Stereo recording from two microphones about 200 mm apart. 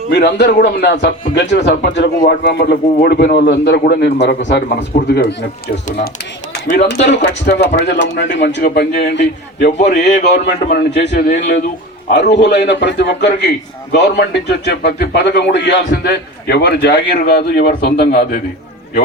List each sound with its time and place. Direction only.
0.1 s speech: 55° left (ahead or behind)
6.7 s speech: 55° left (ahead or behind); by 10.2 s 35° left (ahead or behind)
10.4 s speech: 60° left (ahead or behind)